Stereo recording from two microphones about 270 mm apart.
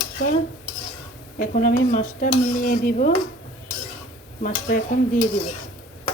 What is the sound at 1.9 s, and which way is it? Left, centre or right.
Dishes, left.